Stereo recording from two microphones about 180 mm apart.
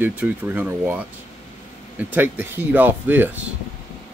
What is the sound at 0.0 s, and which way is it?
Speech, 10° right (ahead or behind).